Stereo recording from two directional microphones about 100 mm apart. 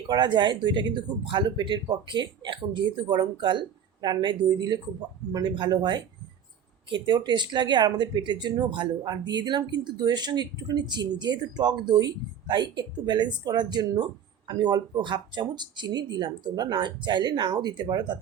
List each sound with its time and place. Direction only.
0.1 s speech: 50° right (ahead or behind)